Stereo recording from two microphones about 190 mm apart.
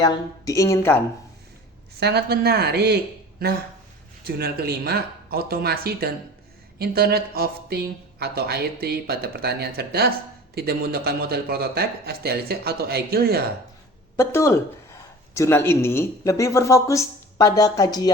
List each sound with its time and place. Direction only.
0.0 s speech: 15° left (ahead or behind)
2.0 s speech: 60° right (ahead or behind)
4.3 s speech: 55° right (ahead or behind)
14.2 s speech: 15° left (ahead or behind)